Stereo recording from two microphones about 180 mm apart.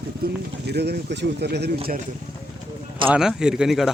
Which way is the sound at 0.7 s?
65° right (ahead or behind).